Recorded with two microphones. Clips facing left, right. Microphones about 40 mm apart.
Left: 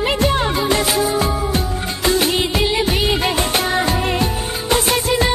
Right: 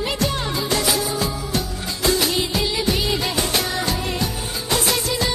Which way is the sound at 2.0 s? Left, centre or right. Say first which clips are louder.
Left 3 dB; left.